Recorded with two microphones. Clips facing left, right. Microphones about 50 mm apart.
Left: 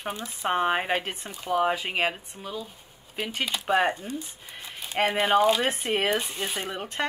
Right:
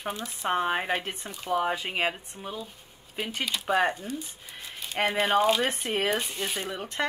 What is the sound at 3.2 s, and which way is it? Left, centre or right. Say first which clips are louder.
Speech: left 1 dB; left.